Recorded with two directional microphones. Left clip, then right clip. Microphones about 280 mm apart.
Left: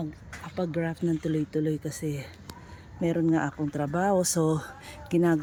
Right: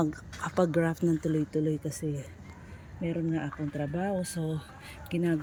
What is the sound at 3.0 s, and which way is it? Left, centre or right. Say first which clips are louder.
Speech: left 7 dB; left.